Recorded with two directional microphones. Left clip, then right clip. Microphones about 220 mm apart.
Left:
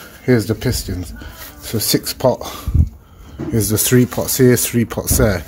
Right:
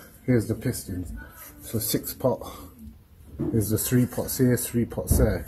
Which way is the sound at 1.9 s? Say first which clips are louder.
Left 10 dB; 45° left (ahead or behind).